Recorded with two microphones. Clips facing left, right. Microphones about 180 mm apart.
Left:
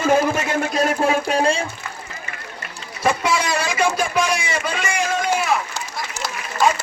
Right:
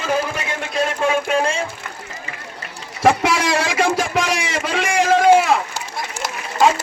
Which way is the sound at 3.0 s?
80° right.